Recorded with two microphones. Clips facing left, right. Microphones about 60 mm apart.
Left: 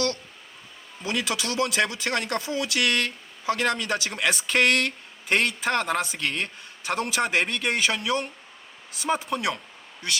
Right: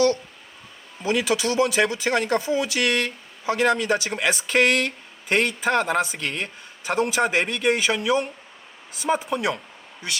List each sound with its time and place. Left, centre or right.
1.0 s speech: centre
1.6 s speech: centre
2.8 s speech: centre